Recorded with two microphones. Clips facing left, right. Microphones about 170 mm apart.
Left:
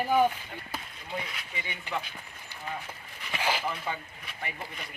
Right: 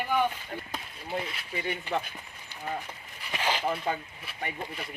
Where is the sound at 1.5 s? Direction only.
45° right (ahead or behind).